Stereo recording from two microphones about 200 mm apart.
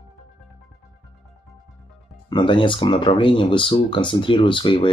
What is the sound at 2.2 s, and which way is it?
Speech, 25° left (ahead or behind).